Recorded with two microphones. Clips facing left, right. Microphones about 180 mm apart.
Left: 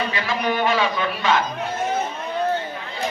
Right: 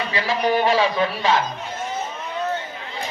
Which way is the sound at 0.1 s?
35° right (ahead or behind).